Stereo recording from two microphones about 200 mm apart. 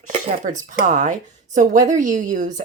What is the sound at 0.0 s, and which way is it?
Speech, 40° right (ahead or behind).